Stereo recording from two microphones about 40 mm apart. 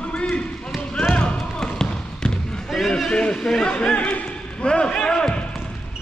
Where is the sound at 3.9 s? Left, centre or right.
Left; by 5.4 s centre.